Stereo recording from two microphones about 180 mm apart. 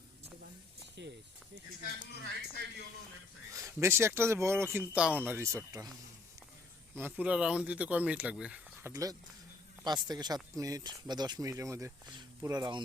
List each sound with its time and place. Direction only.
1.0 s speech: 75° right (ahead or behind)
3.5 s speech: 20° right (ahead or behind)
6.9 s speech: 10° right (ahead or behind)
8.9 s speech: 20° right (ahead or behind)